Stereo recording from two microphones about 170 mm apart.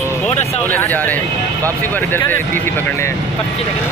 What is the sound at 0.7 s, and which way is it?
Speech, 10° left (ahead or behind).